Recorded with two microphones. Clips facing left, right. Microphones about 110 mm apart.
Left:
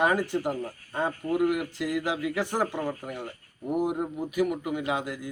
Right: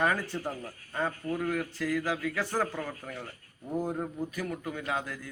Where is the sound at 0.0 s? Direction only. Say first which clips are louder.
Left 5 dB; 20° left (ahead or behind).